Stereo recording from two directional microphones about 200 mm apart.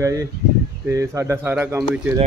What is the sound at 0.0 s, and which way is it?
Speech, 15° right (ahead or behind).